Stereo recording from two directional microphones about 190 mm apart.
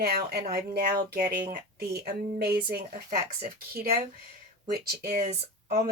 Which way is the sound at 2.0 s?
55° right (ahead or behind).